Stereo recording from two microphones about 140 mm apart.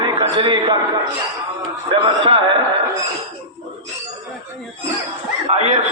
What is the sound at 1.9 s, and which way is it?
Speech, 40° right (ahead or behind).